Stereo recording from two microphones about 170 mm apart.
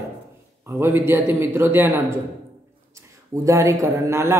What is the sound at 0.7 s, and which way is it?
A man's voice, 15° right (ahead or behind).